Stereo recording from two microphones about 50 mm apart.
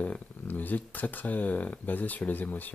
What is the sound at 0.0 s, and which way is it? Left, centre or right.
Speech, left.